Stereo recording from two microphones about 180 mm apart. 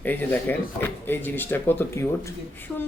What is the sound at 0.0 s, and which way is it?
A woman's voice, 10° left (ahead or behind).